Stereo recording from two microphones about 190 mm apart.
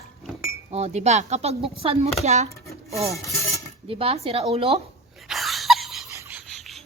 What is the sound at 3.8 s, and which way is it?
Speech, 30° right (ahead or behind).